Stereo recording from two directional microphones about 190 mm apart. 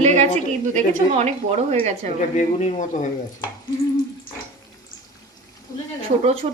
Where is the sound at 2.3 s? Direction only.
40° left (ahead or behind).